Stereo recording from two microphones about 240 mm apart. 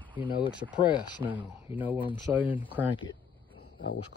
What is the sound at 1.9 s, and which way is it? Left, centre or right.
Speech, left.